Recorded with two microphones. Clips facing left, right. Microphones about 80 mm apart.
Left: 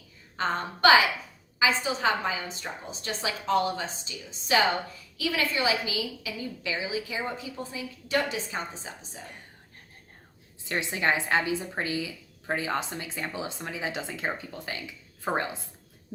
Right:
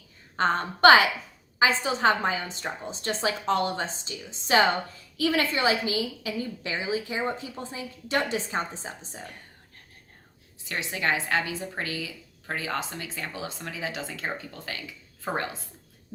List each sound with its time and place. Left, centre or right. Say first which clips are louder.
0.3 s a woman's voice: right 4 dB; right
10.9 s a woman's voice: even; left